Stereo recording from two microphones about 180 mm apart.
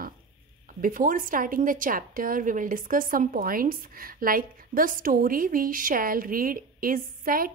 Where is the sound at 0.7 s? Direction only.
50° right (ahead or behind).